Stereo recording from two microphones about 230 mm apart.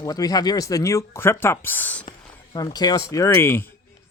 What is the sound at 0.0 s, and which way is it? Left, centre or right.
Speech, centre.